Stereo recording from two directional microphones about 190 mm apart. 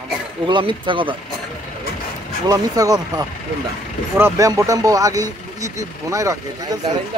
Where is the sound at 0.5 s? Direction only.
25° right (ahead or behind).